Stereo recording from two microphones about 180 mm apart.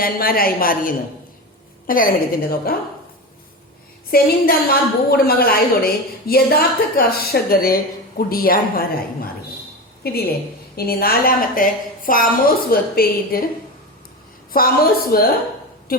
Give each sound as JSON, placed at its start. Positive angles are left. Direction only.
{"t": 0.0, "sound": "a woman's voice", "side_deg": 55}
{"t": 4.1, "sound": "a woman's voice", "side_deg": 55}
{"t": 10.0, "sound": "a woman's voice", "side_deg": 60}
{"t": 14.5, "sound": "a woman's voice", "side_deg": 55}